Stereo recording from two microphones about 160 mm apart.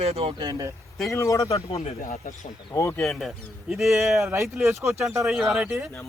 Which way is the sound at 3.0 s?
Centre (ahead or behind).